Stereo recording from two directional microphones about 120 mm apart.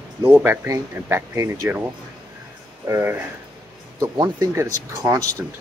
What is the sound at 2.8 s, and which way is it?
A man's voice, 20° right (ahead or behind).